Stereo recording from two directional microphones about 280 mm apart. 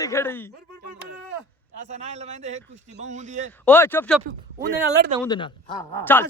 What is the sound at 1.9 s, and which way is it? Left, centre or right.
A man's voice, right.